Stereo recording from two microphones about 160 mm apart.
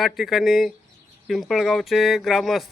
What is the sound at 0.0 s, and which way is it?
Speech, centre (ahead or behind).